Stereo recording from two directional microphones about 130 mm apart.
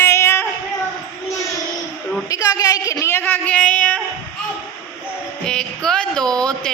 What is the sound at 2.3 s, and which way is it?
Speech, 25° left (ahead or behind).